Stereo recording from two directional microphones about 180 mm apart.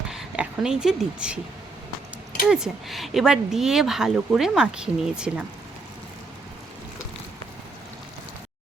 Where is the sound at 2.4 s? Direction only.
5° right (ahead or behind).